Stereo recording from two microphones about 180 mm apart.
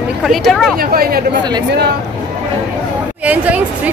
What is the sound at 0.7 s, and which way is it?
Speech, 55° right (ahead or behind).